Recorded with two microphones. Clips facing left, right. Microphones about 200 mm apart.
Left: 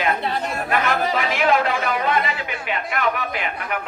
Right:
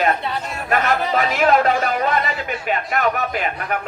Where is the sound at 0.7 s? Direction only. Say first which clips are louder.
Right 3 dB; 45° right (ahead or behind).